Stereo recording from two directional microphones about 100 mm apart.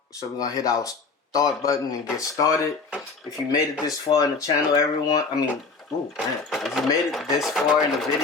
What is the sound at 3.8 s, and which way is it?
Speech, 35° left (ahead or behind).